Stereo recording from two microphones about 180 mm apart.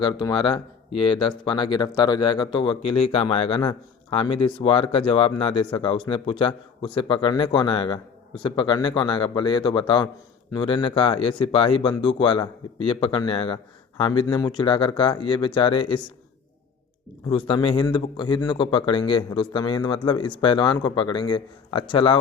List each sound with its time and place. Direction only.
0.0 s speech: 25° left (ahead or behind)
17.2 s speech: 30° left (ahead or behind)